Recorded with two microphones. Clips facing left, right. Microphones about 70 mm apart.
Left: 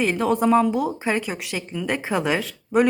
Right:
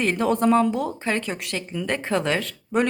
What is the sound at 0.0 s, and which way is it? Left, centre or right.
Speech, centre.